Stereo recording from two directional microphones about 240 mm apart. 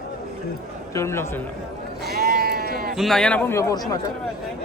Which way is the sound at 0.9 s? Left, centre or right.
Centre.